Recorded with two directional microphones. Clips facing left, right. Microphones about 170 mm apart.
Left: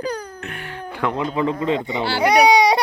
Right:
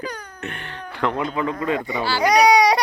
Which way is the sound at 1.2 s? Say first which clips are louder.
Left 3 dB; 30° left (ahead or behind).